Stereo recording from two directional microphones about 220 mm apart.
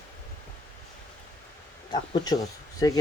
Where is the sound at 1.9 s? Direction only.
20° left (ahead or behind).